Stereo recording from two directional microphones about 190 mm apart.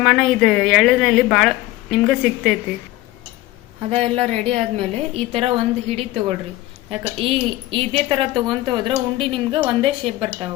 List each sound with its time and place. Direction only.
0.0 s speech: 5° left (ahead or behind)
3.8 s a woman's voice: 30° right (ahead or behind)